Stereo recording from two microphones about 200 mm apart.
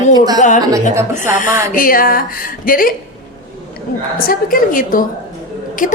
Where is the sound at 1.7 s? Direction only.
45° left (ahead or behind).